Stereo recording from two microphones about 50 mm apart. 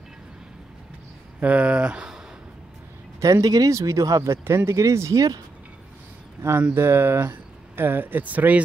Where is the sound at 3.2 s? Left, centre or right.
Right.